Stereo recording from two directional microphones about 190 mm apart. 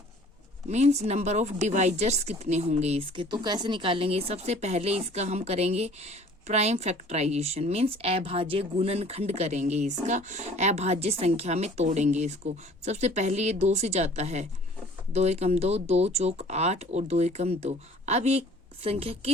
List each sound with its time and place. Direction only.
0.7 s speech: 35° right (ahead or behind)